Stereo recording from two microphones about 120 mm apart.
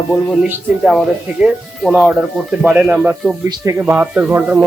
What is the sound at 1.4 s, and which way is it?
Speech, 5° right (ahead or behind).